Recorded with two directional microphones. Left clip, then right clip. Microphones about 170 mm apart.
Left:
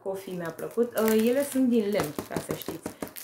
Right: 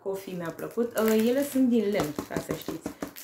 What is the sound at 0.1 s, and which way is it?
Speech, centre (ahead or behind).